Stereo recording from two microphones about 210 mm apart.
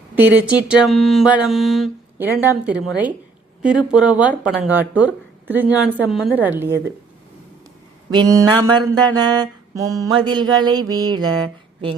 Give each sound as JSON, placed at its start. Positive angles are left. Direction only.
{"t": 0.2, "sound": "speech", "side_deg": -5}
{"t": 8.1, "sound": "speech", "side_deg": -20}
{"t": 9.0, "sound": "mantra", "side_deg": -20}
{"t": 10.0, "sound": "speech", "side_deg": -20}